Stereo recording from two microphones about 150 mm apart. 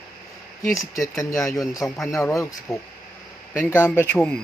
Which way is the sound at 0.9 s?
20° left (ahead or behind).